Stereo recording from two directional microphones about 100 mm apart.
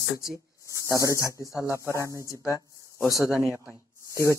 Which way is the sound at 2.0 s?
35° right (ahead or behind).